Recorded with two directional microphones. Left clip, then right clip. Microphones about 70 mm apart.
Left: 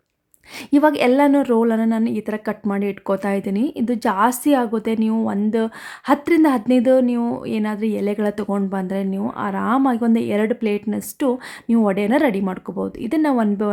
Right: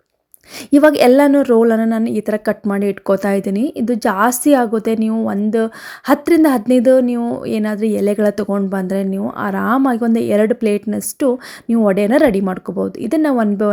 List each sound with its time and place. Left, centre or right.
0.7 s a woman's voice: right
1.3 s speech: right
10.9 s speech: right
11.9 s speech: right